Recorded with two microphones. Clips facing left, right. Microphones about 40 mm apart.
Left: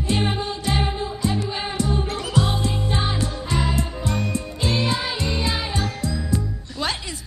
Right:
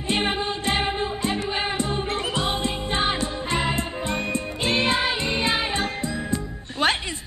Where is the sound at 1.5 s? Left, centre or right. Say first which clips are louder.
Even; right.